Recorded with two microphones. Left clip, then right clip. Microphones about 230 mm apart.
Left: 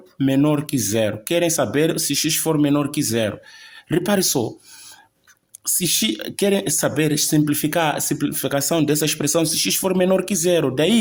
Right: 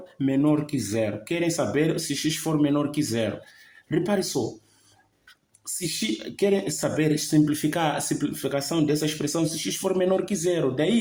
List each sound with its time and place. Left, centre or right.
0.2 s speech: left
5.8 s speech: left